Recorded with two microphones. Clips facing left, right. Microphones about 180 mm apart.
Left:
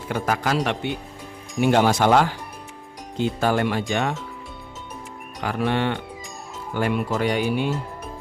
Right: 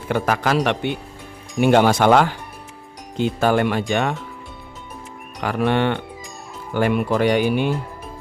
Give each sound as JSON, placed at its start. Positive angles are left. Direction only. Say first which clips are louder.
{"t": 0.1, "sound": "speech", "louder": "right 4 dB", "side_deg": -75}
{"t": 5.4, "sound": "speech", "louder": "right 4 dB", "side_deg": -65}